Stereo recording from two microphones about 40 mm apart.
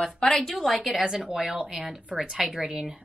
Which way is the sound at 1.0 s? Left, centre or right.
Centre.